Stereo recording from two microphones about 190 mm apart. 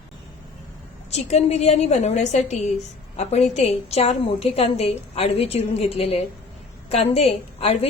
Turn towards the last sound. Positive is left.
turn(degrees=30)  # may be behind; listen again after turning